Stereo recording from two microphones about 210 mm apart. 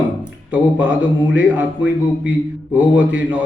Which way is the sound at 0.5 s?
5° right (ahead or behind).